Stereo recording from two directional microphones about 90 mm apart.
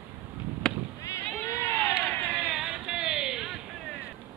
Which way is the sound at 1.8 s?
10° right (ahead or behind).